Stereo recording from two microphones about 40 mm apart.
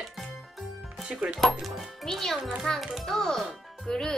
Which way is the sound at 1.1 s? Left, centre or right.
Right.